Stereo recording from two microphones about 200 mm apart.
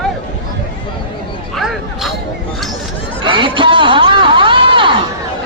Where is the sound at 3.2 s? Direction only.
25° right (ahead or behind).